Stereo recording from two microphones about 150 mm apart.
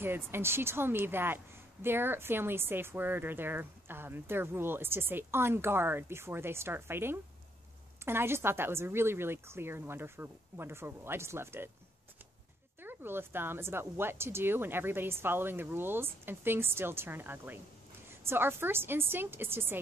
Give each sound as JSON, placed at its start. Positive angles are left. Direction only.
{"t": 0.0, "sound": "a woman's voice", "side_deg": -15}
{"t": 12.8, "sound": "a woman's voice", "side_deg": -15}